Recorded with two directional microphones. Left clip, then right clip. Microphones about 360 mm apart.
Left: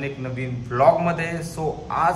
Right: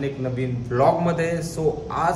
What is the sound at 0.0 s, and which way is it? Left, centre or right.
A man's voice, centre.